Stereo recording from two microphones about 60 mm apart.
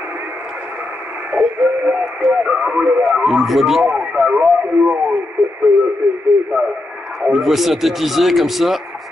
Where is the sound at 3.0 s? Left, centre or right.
Centre.